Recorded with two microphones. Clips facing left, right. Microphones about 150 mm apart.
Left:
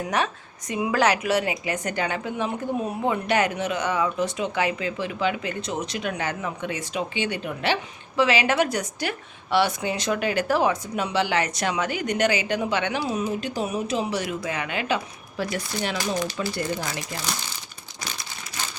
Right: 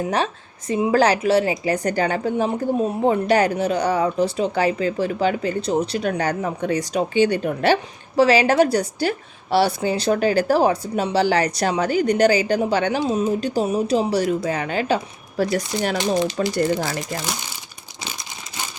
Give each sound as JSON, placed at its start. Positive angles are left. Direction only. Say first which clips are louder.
{"t": 0.0, "sound": "a woman's voice", "louder": "right 3 dB", "side_deg": -30}
{"t": 18.0, "sound": "crumpling", "louder": "right 2 dB", "side_deg": -15}